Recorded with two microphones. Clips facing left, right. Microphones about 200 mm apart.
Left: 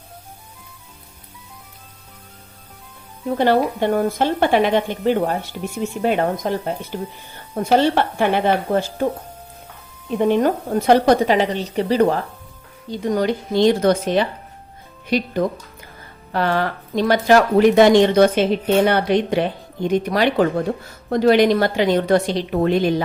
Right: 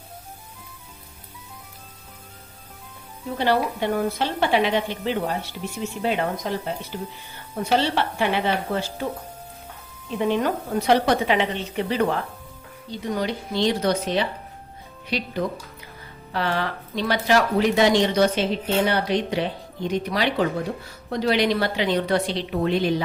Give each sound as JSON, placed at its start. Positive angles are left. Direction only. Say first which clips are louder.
{"t": 3.2, "sound": "speech", "louder": "left 5 dB", "side_deg": 50}
{"t": 10.1, "sound": "a woman's voice", "louder": "left 6 dB", "side_deg": 50}
{"t": 16.3, "sound": "speech", "louder": "left 5 dB", "side_deg": 50}